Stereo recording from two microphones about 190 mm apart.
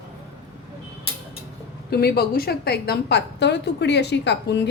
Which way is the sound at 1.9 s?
55° left (ahead or behind).